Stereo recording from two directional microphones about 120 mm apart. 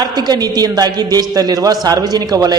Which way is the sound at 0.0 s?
35° right (ahead or behind).